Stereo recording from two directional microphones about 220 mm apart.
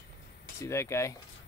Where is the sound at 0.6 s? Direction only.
10° left (ahead or behind).